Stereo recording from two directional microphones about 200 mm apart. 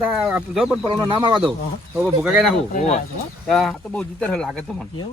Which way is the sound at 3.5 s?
Centre (ahead or behind).